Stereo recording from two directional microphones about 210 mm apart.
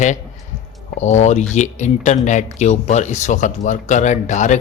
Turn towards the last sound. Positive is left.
turn(degrees=35)  # may be behind; listen again after turning